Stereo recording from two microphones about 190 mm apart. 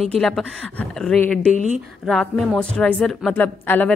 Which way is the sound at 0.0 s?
5° left (ahead or behind).